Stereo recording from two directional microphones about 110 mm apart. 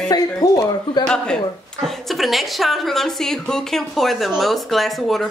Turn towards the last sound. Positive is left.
turn(degrees=0)  # may be behind; listen again after turning